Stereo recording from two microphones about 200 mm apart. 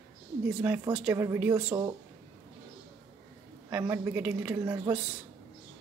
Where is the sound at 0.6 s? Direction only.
10° right (ahead or behind).